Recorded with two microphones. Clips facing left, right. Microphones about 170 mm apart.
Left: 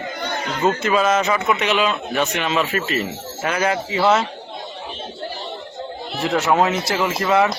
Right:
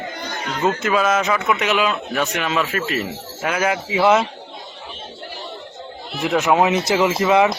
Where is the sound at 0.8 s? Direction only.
Centre (ahead or behind).